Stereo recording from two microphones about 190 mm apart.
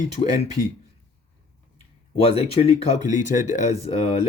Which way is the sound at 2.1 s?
30° left (ahead or behind).